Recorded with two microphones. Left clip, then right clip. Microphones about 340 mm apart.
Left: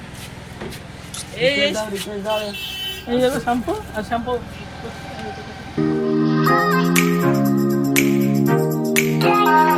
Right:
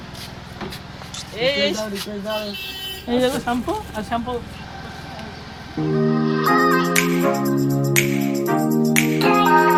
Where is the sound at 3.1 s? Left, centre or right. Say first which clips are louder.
Left 1 dB; centre.